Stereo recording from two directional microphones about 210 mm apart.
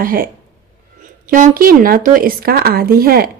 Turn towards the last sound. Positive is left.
turn(degrees=-45)  # may be behind; listen again after turning